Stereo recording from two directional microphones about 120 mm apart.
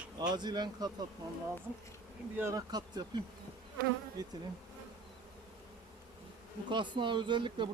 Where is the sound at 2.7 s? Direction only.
35° right (ahead or behind).